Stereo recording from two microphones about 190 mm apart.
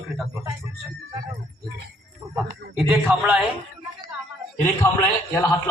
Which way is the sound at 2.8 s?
Centre (ahead or behind).